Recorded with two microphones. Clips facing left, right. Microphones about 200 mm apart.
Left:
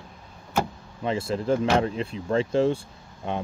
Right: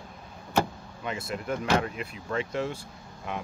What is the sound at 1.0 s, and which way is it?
Speech, 30° left (ahead or behind).